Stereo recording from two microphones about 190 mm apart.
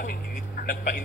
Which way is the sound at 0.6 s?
40° left (ahead or behind).